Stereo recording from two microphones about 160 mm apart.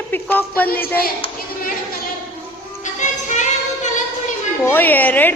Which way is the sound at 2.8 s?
50° left (ahead or behind).